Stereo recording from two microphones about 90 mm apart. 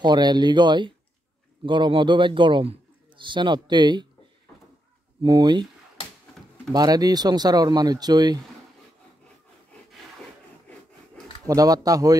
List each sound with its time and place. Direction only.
0.0 s a man's voice: 55° right (ahead or behind)
5.4 s a man's voice: 55° right (ahead or behind)
6.4 s a sound: centre (ahead or behind)
6.7 s speech: 45° right (ahead or behind)
11.4 s speech: 40° right (ahead or behind)